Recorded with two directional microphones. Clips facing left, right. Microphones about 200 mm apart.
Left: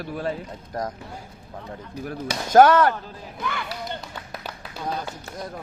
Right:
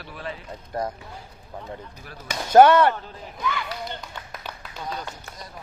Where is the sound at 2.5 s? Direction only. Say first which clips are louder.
Right 1 dB; 10° right (ahead or behind).